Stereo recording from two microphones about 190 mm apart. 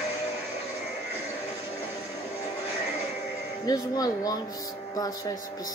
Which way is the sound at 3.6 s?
20° left (ahead or behind).